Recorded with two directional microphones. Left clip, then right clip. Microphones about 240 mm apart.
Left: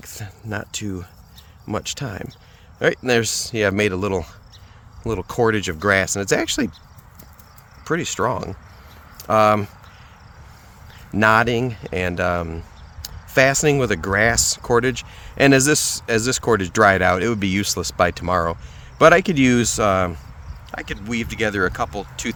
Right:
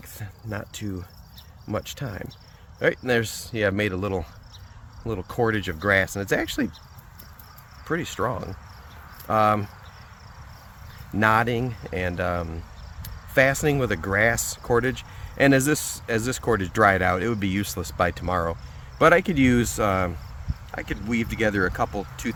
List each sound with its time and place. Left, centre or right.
0.0 s speech: left
7.9 s speech: left
11.2 s speech: left